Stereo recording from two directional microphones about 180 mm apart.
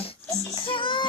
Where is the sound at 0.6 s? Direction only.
30° left (ahead or behind).